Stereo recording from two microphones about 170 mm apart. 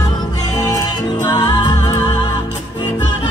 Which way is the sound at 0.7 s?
25° left (ahead or behind).